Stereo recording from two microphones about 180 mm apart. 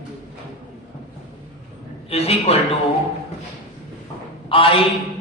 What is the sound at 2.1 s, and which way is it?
Speech, 35° left (ahead or behind).